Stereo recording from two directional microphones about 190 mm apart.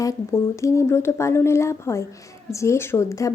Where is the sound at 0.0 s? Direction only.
15° left (ahead or behind).